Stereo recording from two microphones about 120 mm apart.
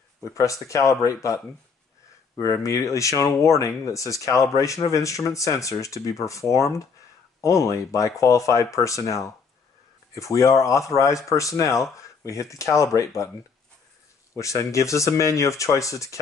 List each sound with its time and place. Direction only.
0.2 s speech: 25° left (ahead or behind)
14.3 s speech: 25° left (ahead or behind)